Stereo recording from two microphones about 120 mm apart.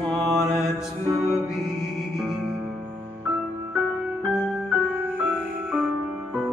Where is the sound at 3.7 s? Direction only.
5° right (ahead or behind).